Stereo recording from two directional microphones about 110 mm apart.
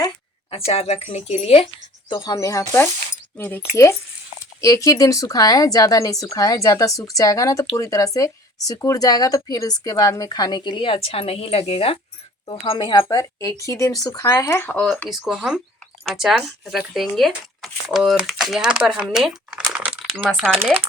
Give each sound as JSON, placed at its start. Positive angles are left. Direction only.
{"t": 0.5, "sound": "speech", "side_deg": 65}
{"t": 2.0, "sound": "speech", "side_deg": 45}
{"t": 2.3, "sound": "a woman's voice", "side_deg": 30}
{"t": 13.0, "sound": "a woman's voice", "side_deg": 30}
{"t": 15.3, "sound": "speech", "side_deg": -5}
{"t": 19.7, "sound": "crumpling", "side_deg": -10}
{"t": 20.6, "sound": "speech", "side_deg": -15}